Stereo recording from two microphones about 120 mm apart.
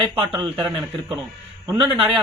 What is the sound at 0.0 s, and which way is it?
A man's voice, 35° right (ahead or behind).